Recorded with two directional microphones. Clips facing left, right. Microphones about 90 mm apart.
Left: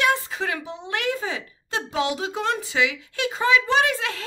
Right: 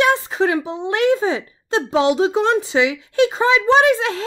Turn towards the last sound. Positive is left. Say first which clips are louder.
# right 7 dB
turn(degrees=-25)  # may be behind; listen again after turning